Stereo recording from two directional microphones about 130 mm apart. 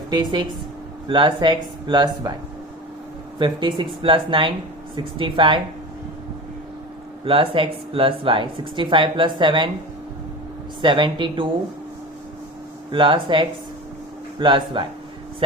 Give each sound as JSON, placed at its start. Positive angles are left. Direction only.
{"t": 0.1, "sound": "speech", "side_deg": -35}
{"t": 3.3, "sound": "speech", "side_deg": -40}
{"t": 7.3, "sound": "speech", "side_deg": -40}
{"t": 10.8, "sound": "speech", "side_deg": -40}
{"t": 12.9, "sound": "speech", "side_deg": -40}